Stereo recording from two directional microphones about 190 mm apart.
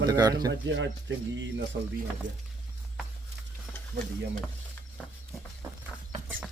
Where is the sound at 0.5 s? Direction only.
70° right (ahead or behind).